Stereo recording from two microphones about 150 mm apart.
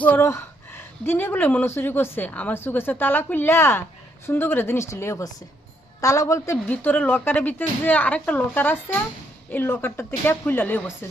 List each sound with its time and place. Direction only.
0.0 s speech: 15° left (ahead or behind)